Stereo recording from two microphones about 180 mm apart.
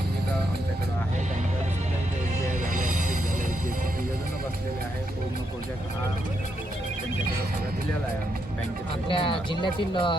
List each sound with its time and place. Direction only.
2.7 s music: 50° right (ahead or behind)
9.0 s speech: 30° left (ahead or behind)